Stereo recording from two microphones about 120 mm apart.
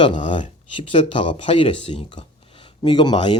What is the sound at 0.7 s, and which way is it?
Speech, 45° left (ahead or behind).